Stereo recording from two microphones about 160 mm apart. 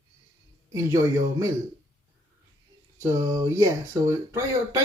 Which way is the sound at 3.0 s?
20° right (ahead or behind).